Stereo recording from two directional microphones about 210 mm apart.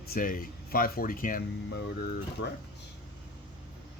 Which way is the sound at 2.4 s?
60° left (ahead or behind).